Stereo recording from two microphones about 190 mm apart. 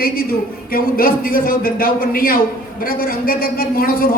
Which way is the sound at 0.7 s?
50° left (ahead or behind).